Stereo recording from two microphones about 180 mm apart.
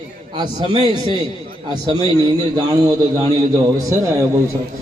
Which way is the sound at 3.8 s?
20° right (ahead or behind).